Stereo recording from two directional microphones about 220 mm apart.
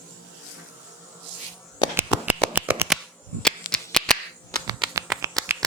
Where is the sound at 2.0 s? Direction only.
5° right (ahead or behind).